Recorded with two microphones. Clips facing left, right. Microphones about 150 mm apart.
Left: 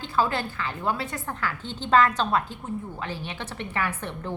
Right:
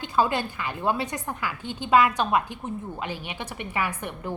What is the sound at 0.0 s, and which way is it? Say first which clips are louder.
A woman's voice: right 1 dB; 15° right (ahead or behind).